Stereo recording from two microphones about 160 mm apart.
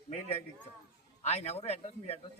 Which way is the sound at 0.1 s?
40° left (ahead or behind).